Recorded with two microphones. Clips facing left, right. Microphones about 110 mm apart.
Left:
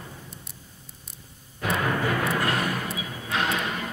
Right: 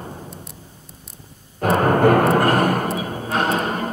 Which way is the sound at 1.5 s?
45° right (ahead or behind).